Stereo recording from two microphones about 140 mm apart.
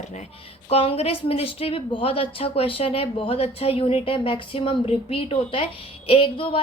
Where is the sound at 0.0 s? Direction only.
55° left (ahead or behind).